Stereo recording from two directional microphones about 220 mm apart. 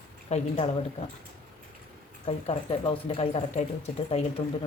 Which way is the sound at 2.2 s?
25° left (ahead or behind).